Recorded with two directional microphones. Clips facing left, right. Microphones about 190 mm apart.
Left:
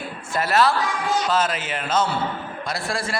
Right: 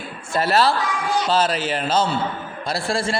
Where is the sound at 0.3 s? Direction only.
30° right (ahead or behind).